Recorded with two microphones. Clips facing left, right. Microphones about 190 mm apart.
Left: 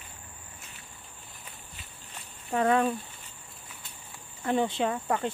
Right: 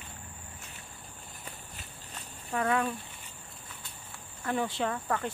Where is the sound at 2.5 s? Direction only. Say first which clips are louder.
Left 5 dB; 30° left (ahead or behind).